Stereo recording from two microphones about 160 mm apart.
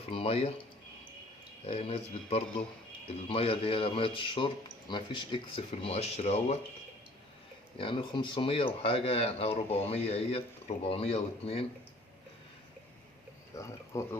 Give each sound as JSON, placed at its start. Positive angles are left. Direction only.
{"t": 0.0, "sound": "a sound", "side_deg": 35}
{"t": 1.6, "sound": "speech", "side_deg": 35}
{"t": 7.8, "sound": "speech", "side_deg": 30}
{"t": 13.6, "sound": "speech", "side_deg": 20}